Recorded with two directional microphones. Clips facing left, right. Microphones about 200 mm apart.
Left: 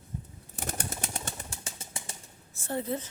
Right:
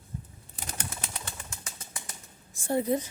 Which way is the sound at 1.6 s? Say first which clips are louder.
Left 2 dB; 25° left (ahead or behind).